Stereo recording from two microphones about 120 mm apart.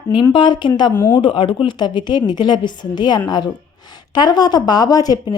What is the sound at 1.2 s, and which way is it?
A woman's voice, 45° left (ahead or behind).